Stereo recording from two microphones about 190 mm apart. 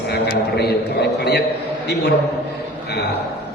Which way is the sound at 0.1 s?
55° left (ahead or behind).